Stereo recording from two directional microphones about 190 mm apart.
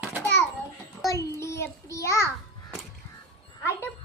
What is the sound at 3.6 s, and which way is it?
Speech, 15° left (ahead or behind).